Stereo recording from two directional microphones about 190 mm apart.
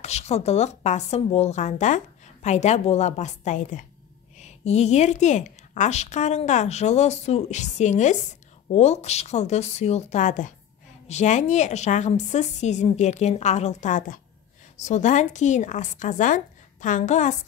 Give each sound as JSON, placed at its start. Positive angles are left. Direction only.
{"t": 0.0, "sound": "a woman's voice", "side_deg": 35}